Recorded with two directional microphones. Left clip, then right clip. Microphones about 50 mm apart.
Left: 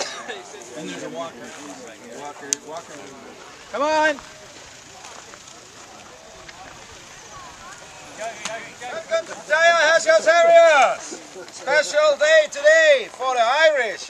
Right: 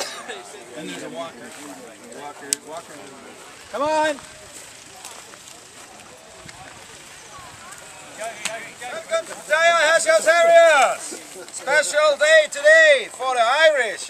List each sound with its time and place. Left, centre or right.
0.0 s a sound: left
0.7 s speech: centre
3.7 s speech: right
8.2 s speech: centre
8.5 s speech: centre